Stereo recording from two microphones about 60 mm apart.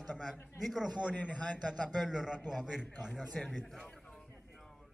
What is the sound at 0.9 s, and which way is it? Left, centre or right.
Speech, left.